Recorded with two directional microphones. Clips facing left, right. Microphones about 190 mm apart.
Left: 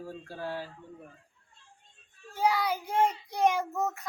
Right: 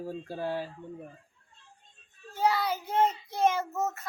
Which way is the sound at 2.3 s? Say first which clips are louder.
Even; 10° left (ahead or behind).